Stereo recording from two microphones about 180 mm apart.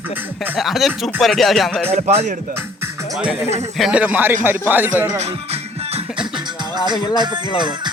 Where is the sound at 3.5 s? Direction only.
35° right (ahead or behind).